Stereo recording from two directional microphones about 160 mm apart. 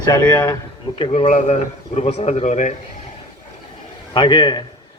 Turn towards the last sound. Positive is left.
turn(degrees=30)  # may be behind; listen again after turning